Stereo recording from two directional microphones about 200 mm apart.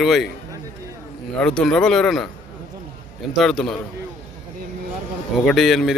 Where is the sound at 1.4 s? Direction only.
5° left (ahead or behind).